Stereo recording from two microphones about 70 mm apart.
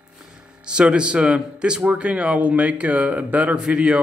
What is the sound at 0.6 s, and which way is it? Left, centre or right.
Speech, centre.